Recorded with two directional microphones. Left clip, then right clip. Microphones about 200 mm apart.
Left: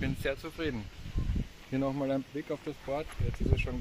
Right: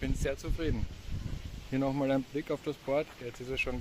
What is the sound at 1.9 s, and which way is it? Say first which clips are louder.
Speech: right 2 dB; 35° right (ahead or behind).